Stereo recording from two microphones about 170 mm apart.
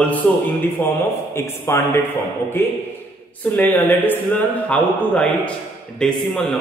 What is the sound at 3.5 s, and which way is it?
A man's voice, 10° left (ahead or behind).